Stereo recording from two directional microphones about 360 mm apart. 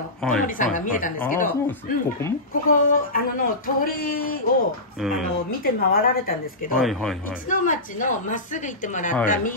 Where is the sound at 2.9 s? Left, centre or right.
Left.